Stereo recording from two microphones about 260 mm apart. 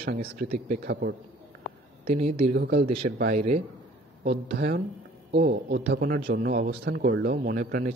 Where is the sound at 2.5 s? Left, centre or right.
Right.